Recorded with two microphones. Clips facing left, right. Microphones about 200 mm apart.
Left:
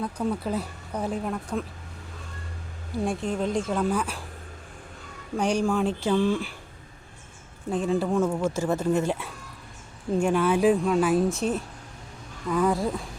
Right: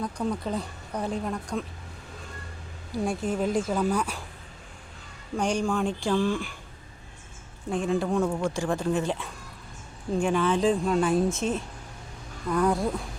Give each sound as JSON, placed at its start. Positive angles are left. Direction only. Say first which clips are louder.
{"t": 0.0, "sound": "speech", "louder": "left 1 dB", "side_deg": 5}
{"t": 3.0, "sound": "speech", "louder": "even", "side_deg": 0}
{"t": 5.4, "sound": "speech", "louder": "left 2 dB", "side_deg": 5}
{"t": 7.9, "sound": "speech", "louder": "left 1 dB", "side_deg": 5}